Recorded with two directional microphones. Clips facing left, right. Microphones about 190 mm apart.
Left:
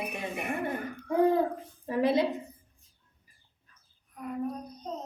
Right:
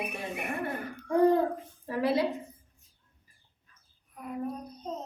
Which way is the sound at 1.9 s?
20° left (ahead or behind).